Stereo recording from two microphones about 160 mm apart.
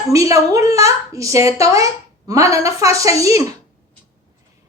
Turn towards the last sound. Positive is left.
turn(degrees=-20)  # may be behind; listen again after turning